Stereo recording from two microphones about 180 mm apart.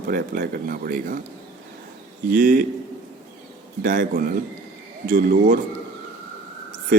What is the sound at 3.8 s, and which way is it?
Speech, 50° right (ahead or behind).